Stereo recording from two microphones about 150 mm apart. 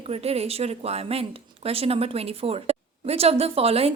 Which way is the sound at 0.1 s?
40° right (ahead or behind).